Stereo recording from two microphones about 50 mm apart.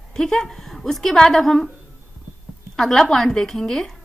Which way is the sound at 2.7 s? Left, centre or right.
Centre.